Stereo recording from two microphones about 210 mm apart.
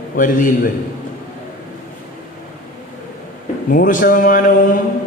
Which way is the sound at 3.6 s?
40° left (ahead or behind).